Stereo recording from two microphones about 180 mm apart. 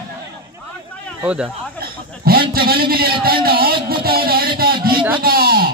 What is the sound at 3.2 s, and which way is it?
Speech, 55° right (ahead or behind).